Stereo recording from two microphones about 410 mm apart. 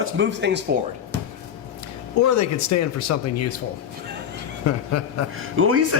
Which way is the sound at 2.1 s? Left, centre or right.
Left.